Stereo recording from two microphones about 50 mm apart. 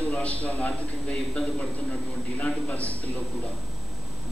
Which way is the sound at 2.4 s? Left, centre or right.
Left.